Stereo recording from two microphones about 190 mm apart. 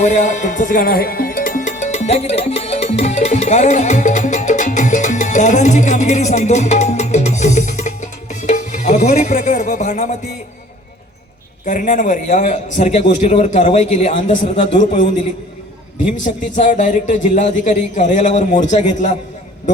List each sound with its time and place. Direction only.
0.0 s speech: 40° left (ahead or behind)
11.6 s a man's voice: 40° left (ahead or behind)
16.1 s a man's voice: 40° left (ahead or behind)